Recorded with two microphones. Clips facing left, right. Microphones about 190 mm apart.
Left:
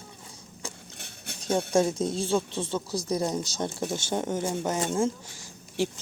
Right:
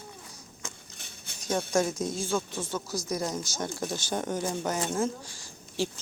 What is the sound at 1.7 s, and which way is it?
Speech, 30° left (ahead or behind).